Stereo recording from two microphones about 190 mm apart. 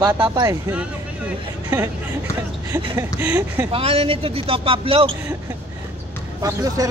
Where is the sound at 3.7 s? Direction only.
30° right (ahead or behind).